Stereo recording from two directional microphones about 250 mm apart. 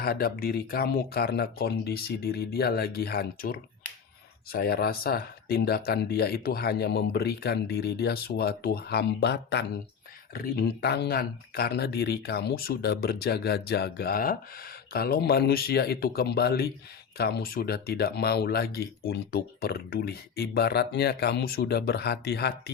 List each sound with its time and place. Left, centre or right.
0.0 s speech: left